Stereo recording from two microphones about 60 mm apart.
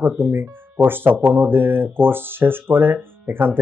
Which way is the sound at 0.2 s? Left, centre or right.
Right.